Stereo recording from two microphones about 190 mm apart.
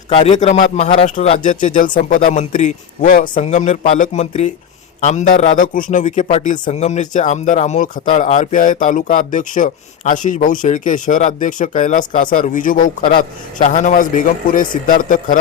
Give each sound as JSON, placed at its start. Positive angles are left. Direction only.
{"t": 0.1, "sound": "a man's voice", "side_deg": 35}